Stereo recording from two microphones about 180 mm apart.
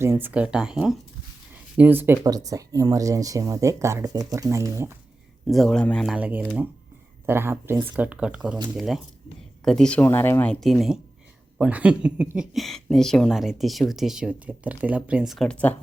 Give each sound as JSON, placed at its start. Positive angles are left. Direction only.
{"t": 0.0, "sound": "speech", "side_deg": -10}
{"t": 5.5, "sound": "speech", "side_deg": 0}
{"t": 6.1, "sound": "speech", "side_deg": -10}